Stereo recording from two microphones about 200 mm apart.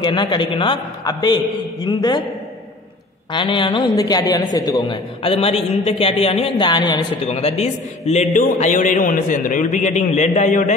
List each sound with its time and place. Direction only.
0.0 s a man's voice: 25° left (ahead or behind)
3.3 s a man's voice: 25° left (ahead or behind)
7.2 s a man's voice: 30° left (ahead or behind)